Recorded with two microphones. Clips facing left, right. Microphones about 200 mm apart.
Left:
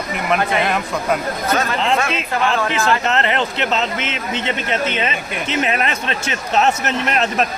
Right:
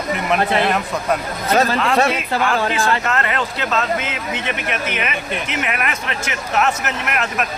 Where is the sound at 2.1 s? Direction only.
25° left (ahead or behind).